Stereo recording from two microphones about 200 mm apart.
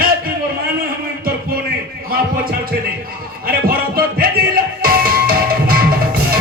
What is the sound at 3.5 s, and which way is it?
Music, 50° right (ahead or behind).